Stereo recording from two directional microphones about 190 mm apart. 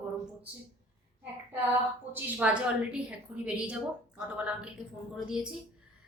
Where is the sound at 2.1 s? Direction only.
10° right (ahead or behind).